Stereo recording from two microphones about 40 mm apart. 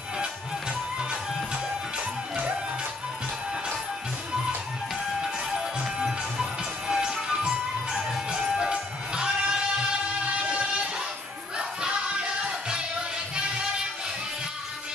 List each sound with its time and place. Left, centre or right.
5.2 s music: centre